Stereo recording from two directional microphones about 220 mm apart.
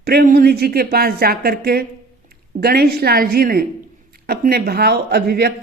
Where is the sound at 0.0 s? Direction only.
45° right (ahead or behind).